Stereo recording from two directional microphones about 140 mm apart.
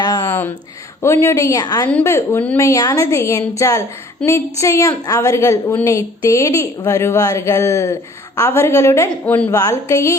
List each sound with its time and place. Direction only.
0.3 s a sound: 15° left (ahead or behind)
1.0 s a woman's voice: 20° left (ahead or behind)
1.9 s a woman's voice: 15° left (ahead or behind)
9.6 s a woman's voice: 25° left (ahead or behind)